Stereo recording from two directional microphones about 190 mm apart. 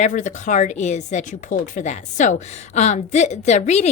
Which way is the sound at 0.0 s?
40° left (ahead or behind).